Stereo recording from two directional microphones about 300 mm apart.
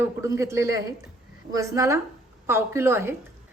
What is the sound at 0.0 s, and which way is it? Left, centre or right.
A woman's voice, centre.